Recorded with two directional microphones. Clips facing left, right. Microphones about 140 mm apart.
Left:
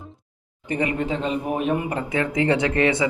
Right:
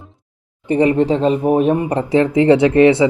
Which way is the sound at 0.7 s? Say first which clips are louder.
Right 10 dB; 30° right (ahead or behind).